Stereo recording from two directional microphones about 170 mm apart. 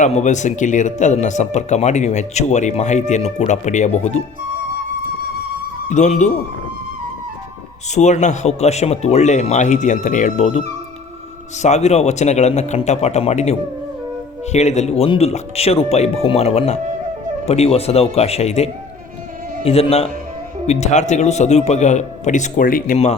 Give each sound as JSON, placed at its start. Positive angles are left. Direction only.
{"t": 0.0, "sound": "speech", "side_deg": 45}
{"t": 5.9, "sound": "speech", "side_deg": 45}
{"t": 7.9, "sound": "speech", "side_deg": 45}
{"t": 11.6, "sound": "speech", "side_deg": 40}